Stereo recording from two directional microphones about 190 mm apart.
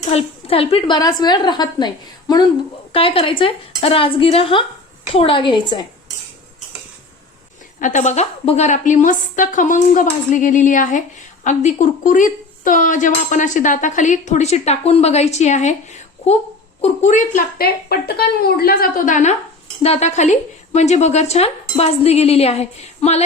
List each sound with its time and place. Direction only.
0.1 s a woman's voice: 30° left (ahead or behind)
7.8 s a woman's voice: 40° left (ahead or behind)